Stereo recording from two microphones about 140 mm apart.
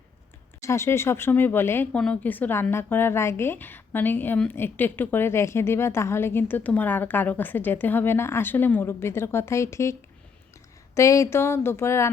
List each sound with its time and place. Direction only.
0.6 s speech: 20° left (ahead or behind)